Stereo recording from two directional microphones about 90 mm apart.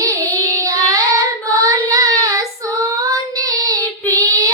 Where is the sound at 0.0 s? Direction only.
40° right (ahead or behind).